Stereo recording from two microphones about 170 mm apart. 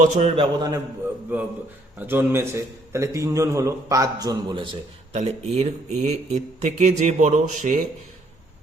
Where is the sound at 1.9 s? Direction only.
15° right (ahead or behind); by 4.8 s 30° right (ahead or behind).